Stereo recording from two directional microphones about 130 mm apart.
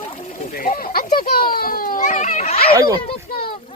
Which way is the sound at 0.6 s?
90° left.